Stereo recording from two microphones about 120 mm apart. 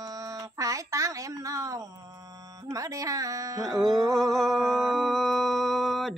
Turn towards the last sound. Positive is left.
turn(degrees=0)  # may be behind; listen again after turning